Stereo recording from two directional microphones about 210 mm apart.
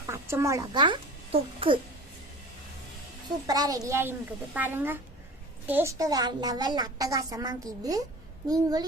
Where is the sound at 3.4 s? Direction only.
20° right (ahead or behind).